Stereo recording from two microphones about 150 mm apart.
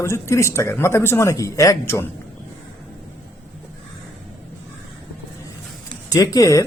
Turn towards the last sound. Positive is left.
turn(degrees=20)  # may be behind; listen again after turning